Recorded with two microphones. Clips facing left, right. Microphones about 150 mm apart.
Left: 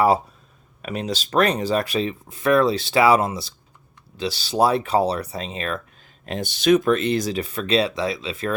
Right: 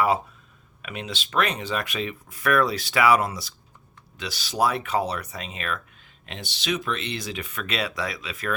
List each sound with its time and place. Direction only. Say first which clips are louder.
0.8 s speech: left 7 dB; 40° left (ahead or behind)
6.2 s speech: left 11 dB; 45° left (ahead or behind); by 8.5 s 30° left (ahead or behind)